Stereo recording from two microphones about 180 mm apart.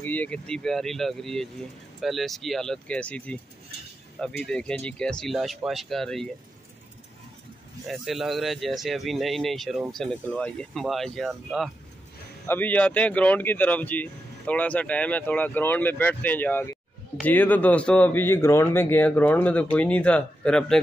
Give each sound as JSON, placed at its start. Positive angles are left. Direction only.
{"t": 0.0, "sound": "speech", "side_deg": 10}
{"t": 4.5, "sound": "speech", "side_deg": 5}
{"t": 7.9, "sound": "speech", "side_deg": 0}